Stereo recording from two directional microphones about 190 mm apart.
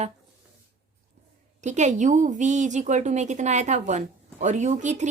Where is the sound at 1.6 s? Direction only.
40° right (ahead or behind).